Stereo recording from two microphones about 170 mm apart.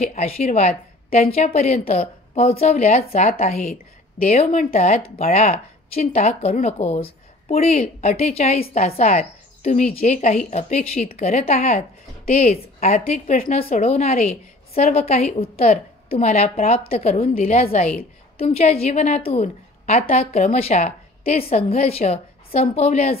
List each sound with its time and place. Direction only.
0.0 s a woman's voice: 40° left (ahead or behind)
13.7 s speech: 40° left (ahead or behind)
21.2 s a woman's voice: 60° left (ahead or behind)
21.5 s speech: 35° left (ahead or behind)